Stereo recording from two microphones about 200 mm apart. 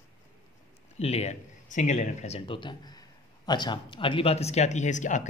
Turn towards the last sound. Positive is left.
turn(degrees=40)  # may be behind; listen again after turning